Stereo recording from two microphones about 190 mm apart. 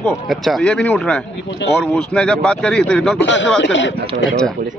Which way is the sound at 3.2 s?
70° left (ahead or behind).